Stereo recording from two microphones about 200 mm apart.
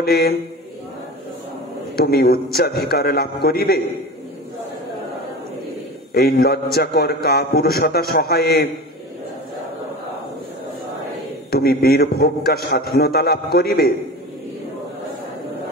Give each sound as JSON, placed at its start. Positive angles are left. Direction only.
{"t": 0.0, "sound": "a man's voice", "side_deg": 50}
{"t": 2.0, "sound": "a man's voice", "side_deg": 50}
{"t": 6.1, "sound": "a man's voice", "side_deg": 50}
{"t": 11.8, "sound": "a man's voice", "side_deg": 50}